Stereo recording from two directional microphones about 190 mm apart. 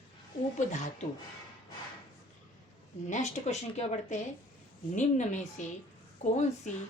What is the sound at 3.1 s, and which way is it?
Speech, 35° left (ahead or behind).